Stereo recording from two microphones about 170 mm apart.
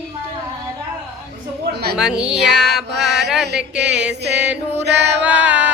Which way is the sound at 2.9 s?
80° right.